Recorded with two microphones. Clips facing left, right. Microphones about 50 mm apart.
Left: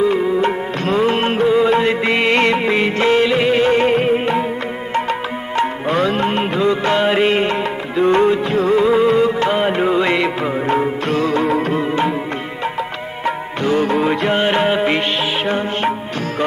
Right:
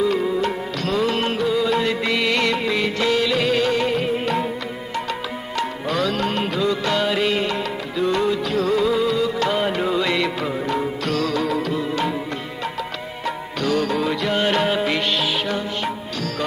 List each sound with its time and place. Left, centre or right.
0.0 s music: left
5.5 s music: left
13.2 s music: left